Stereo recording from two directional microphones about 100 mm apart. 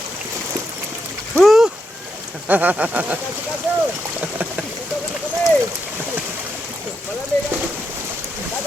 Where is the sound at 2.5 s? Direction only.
15° right (ahead or behind).